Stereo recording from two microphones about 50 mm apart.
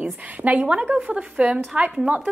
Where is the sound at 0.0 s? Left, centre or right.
Right.